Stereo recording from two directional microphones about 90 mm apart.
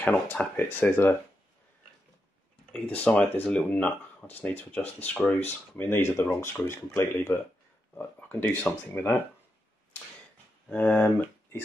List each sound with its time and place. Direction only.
0.0 s speech: 20° left (ahead or behind)
2.7 s speech: 15° left (ahead or behind)
10.7 s speech: 15° left (ahead or behind)